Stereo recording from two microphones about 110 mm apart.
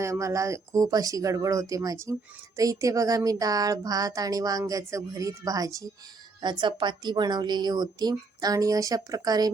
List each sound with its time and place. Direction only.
0.0 s speech: 25° right (ahead or behind)
6.4 s speech: 45° right (ahead or behind)